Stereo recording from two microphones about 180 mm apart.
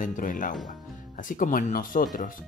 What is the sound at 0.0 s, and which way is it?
Speech, 45° left (ahead or behind).